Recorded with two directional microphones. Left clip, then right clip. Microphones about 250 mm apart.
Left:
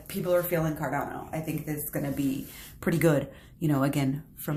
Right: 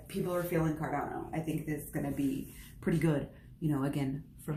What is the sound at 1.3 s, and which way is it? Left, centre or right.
Speech, left.